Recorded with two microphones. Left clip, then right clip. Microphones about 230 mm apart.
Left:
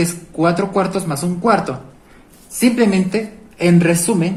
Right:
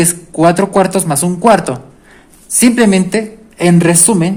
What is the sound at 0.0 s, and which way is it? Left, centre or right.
A woman's voice, right.